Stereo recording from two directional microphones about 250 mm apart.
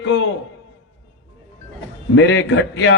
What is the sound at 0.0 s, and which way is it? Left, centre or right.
Speech, left.